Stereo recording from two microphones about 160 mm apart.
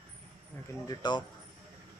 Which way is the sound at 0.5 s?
10° left (ahead or behind).